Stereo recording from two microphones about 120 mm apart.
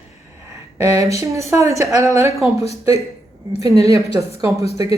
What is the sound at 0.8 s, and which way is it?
A woman's voice, 25° right (ahead or behind).